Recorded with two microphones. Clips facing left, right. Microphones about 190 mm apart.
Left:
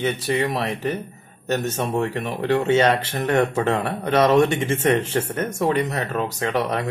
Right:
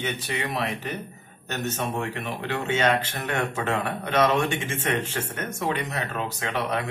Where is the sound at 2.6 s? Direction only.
35° left (ahead or behind).